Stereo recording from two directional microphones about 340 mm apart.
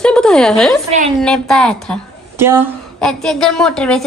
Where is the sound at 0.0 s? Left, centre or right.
Centre.